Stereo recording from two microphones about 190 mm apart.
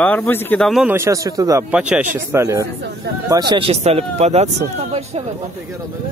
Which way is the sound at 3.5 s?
30° right (ahead or behind).